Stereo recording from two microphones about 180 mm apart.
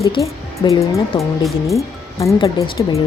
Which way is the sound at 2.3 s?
25° left (ahead or behind).